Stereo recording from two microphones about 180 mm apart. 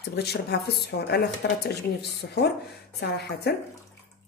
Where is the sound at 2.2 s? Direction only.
75° left (ahead or behind).